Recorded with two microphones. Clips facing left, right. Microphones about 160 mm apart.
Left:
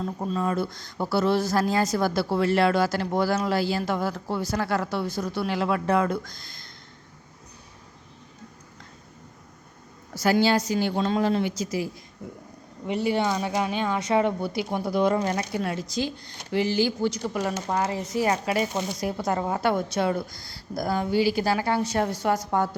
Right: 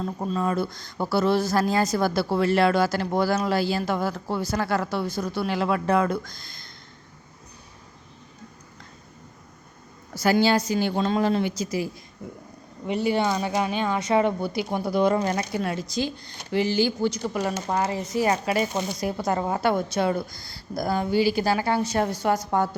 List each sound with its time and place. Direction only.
0.3 s a woman's voice: 45° right (ahead or behind)
10.2 s a woman's voice: 55° right (ahead or behind)
12.9 s a woman's voice: 50° right (ahead or behind); by 22.7 s 25° right (ahead or behind)